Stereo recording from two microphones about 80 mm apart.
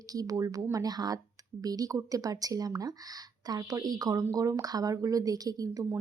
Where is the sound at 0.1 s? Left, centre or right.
Right.